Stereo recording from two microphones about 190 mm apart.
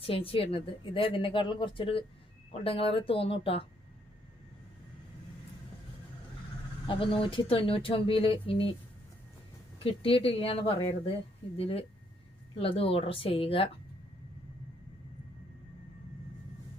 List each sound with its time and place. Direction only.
0.0 s a woman's voice: 30° left (ahead or behind)
6.8 s a woman's voice: 25° left (ahead or behind)
9.7 s a woman's voice: 30° left (ahead or behind)